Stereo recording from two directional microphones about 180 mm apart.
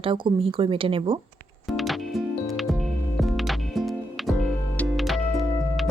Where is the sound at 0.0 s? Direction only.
30° right (ahead or behind).